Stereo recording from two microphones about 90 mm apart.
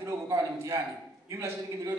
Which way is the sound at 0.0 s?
35° right (ahead or behind).